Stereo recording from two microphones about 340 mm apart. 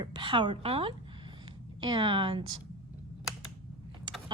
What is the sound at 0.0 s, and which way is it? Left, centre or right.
Speech, centre.